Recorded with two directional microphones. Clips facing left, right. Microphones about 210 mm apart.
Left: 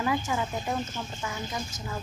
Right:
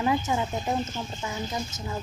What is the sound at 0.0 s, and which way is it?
Speech, 25° right (ahead or behind).